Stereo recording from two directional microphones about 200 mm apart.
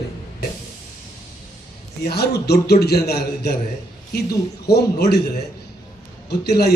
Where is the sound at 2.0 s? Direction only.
55° left (ahead or behind).